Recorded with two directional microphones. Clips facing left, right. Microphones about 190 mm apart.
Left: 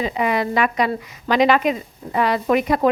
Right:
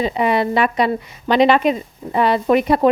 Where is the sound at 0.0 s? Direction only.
30° right (ahead or behind).